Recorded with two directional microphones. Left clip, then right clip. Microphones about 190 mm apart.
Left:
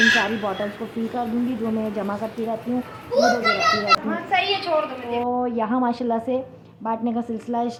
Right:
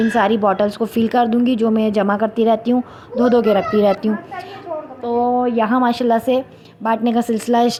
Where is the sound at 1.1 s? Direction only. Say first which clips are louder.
Right 10 dB; 30° right (ahead or behind).